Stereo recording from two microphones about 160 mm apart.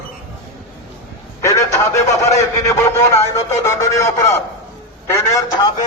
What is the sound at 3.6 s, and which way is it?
Speech, 20° left (ahead or behind).